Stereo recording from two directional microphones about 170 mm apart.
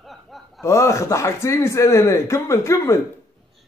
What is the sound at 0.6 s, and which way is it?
Speech, 15° left (ahead or behind).